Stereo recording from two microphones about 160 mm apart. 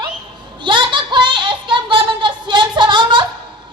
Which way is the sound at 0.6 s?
30° right (ahead or behind).